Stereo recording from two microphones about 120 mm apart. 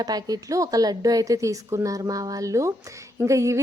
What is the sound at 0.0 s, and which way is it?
A woman's voice, 35° right (ahead or behind).